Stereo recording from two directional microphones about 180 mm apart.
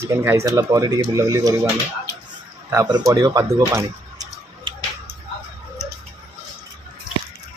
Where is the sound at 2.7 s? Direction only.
20° right (ahead or behind).